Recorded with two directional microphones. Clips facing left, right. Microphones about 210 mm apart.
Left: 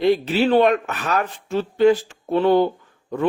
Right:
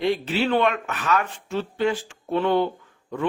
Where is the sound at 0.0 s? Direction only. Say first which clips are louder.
Left 5 dB; 40° left (ahead or behind).